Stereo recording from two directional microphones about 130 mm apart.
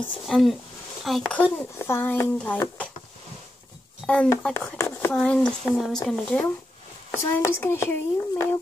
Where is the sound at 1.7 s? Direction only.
20° left (ahead or behind).